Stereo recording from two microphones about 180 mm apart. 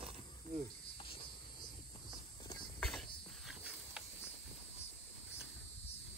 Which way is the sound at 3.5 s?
5° right (ahead or behind).